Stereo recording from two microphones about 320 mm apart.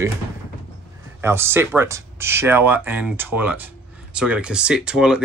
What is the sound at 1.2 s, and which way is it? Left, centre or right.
Speech, centre.